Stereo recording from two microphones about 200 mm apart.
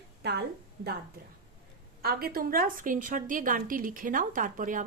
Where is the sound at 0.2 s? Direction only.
55° right (ahead or behind).